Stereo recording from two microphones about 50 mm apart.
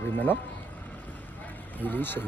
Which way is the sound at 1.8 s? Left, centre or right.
Left.